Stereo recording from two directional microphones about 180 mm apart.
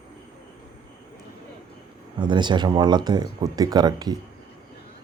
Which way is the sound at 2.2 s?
25° right (ahead or behind).